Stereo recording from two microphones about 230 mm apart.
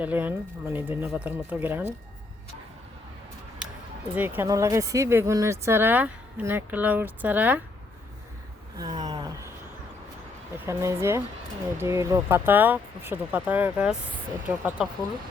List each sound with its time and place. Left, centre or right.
0.0 s speech: centre
4.1 s speech: centre
8.8 s a sound: centre
10.7 s speech: centre